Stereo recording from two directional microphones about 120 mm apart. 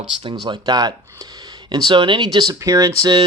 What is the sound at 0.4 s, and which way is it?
Speech, 35° right (ahead or behind).